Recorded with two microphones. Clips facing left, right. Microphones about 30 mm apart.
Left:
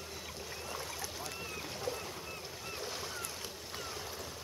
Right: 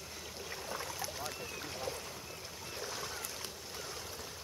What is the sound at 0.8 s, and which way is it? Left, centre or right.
Boat, centre.